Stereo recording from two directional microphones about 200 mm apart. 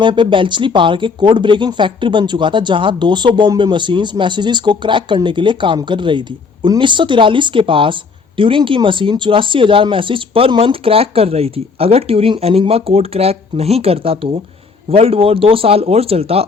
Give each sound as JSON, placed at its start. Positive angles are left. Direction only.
{"t": 0.0, "sound": "speech", "side_deg": -25}